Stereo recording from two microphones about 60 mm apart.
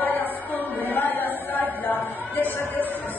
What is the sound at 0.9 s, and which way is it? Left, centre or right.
Chant, left.